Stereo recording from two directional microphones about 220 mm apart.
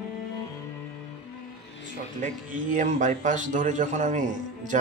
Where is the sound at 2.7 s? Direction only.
35° right (ahead or behind).